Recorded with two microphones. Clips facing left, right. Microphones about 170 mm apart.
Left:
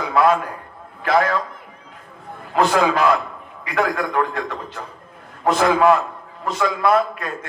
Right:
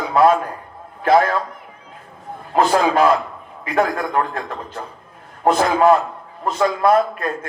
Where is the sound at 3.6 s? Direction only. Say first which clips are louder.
Right 2 dB; 35° right (ahead or behind).